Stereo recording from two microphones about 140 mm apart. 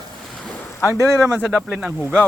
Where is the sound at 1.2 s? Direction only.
Centre (ahead or behind).